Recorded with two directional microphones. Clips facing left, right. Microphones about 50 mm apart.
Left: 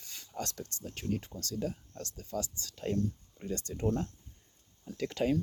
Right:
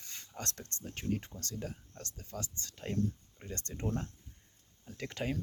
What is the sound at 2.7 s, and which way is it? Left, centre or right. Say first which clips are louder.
Speech: left 6 dB; centre.